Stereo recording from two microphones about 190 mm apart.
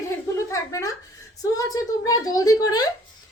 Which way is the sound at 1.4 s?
20° left (ahead or behind).